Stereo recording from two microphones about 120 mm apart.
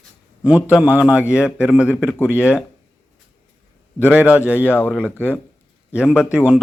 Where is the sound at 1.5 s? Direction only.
20° left (ahead or behind).